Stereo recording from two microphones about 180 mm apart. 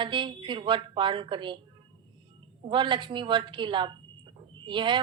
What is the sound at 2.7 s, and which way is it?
A woman's voice, 25° right (ahead or behind).